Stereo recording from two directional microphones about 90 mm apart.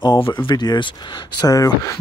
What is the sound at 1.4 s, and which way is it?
Speech, 40° left (ahead or behind).